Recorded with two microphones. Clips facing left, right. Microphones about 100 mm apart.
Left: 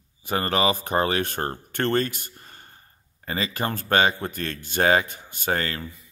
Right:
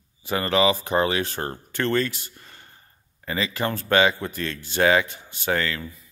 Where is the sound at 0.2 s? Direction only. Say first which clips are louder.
Right 2 dB; 45° left (ahead or behind).